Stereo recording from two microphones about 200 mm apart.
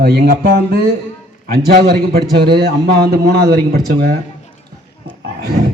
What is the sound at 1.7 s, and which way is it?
Speech, 50° right (ahead or behind).